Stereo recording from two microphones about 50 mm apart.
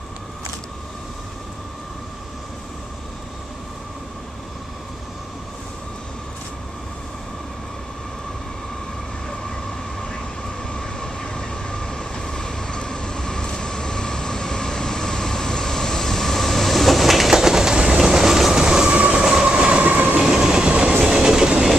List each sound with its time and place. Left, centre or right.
10.7 s train: centre; by 19.1 s right
19.1 s train: centre
19.8 s train: right
20.2 s train: centre